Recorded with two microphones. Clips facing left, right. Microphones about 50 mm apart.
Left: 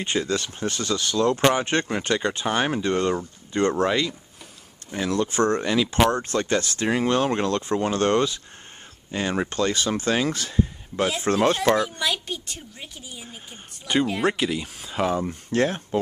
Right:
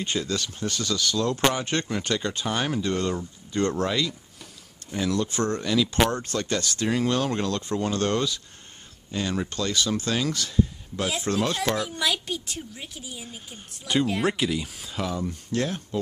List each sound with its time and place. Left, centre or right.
0.0 s speech: left
5.3 s speech: left
11.5 s speech: left
11.9 s speech: centre
14.9 s speech: left